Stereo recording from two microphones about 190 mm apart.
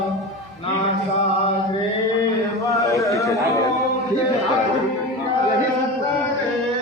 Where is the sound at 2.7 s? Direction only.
15° left (ahead or behind).